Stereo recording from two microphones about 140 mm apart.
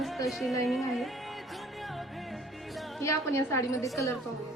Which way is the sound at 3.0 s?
20° left (ahead or behind).